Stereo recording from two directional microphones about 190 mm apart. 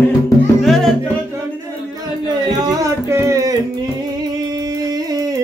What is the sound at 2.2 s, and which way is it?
Music, 20° right (ahead or behind).